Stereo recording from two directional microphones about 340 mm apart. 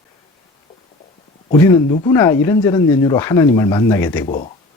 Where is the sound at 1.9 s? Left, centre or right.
Centre.